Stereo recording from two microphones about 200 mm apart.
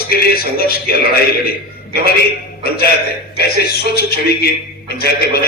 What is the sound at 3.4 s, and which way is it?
A man's voice, 50° left (ahead or behind).